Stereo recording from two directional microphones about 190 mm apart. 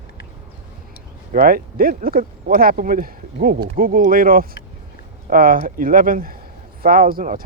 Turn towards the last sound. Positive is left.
turn(degrees=-50)  # may be behind; listen again after turning